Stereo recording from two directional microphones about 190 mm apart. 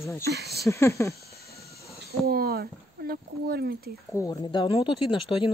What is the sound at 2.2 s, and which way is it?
Speech, 55° right (ahead or behind).